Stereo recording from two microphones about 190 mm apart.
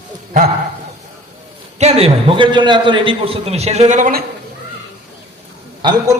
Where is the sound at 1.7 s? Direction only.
35° right (ahead or behind).